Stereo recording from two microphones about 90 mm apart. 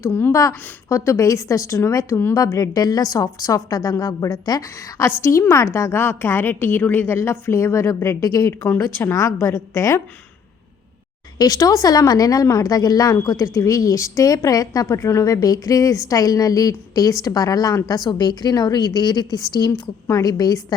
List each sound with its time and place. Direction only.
0.1 s a woman's voice: 30° left (ahead or behind)
5.0 s a woman's voice: 30° left (ahead or behind)
8.6 s a woman's voice: 25° left (ahead or behind)
11.3 s a woman's voice: 45° left (ahead or behind)